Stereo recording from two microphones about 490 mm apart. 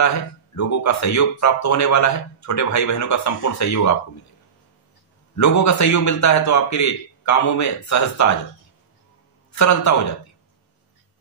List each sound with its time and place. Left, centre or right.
0.0 s speech: left
5.3 s speech: left
9.5 s a man's voice: left